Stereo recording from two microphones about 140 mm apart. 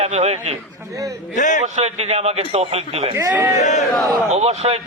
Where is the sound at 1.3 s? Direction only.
60° left (ahead or behind).